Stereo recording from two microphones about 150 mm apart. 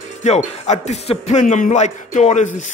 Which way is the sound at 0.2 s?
50° left (ahead or behind).